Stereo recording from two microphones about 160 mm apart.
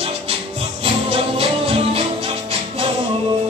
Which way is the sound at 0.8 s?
35° right (ahead or behind).